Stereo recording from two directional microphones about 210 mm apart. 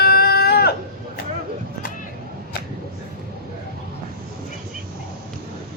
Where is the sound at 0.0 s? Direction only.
50° left (ahead or behind).